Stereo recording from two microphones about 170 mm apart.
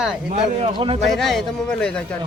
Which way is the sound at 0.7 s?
30° right (ahead or behind).